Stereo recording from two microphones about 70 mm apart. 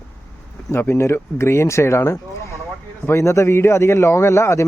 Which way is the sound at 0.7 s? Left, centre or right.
Left.